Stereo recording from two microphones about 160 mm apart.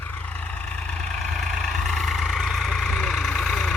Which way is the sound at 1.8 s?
Centre (ahead or behind).